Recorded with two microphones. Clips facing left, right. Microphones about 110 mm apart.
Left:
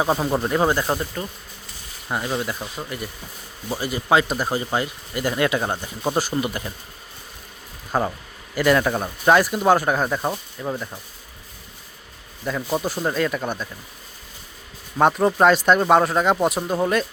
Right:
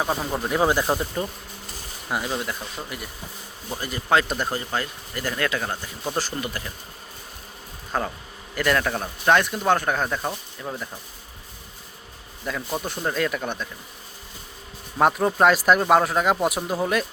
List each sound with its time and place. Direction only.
0.0 s speech: 10° left (ahead or behind); by 1.0 s 10° right (ahead or behind)
2.0 s speech: centre (ahead or behind)
3.7 s speech: 10° left (ahead or behind)
4.4 s speech: 15° left (ahead or behind)
7.9 s speech: 10° left (ahead or behind)
12.5 s speech: 10° left (ahead or behind)
14.9 s speech: centre (ahead or behind)